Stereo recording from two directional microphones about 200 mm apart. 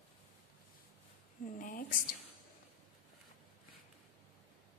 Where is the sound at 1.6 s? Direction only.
40° left (ahead or behind).